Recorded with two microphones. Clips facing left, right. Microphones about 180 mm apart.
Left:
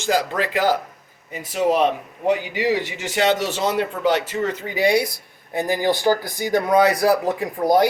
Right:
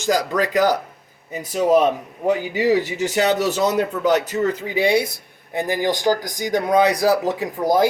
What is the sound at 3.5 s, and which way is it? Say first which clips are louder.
Speech: right 3 dB; 40° right (ahead or behind).